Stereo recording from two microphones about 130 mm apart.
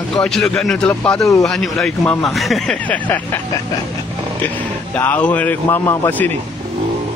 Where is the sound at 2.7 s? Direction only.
10° left (ahead or behind).